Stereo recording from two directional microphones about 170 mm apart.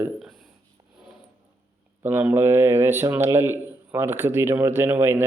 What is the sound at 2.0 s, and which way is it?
A man's voice, 10° right (ahead or behind).